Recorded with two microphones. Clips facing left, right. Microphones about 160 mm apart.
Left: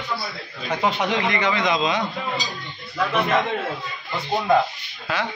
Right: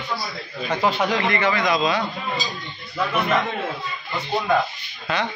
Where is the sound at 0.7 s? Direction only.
20° left (ahead or behind).